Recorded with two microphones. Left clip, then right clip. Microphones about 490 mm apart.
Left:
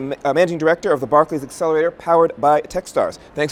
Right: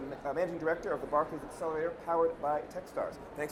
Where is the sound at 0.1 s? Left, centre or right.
Left.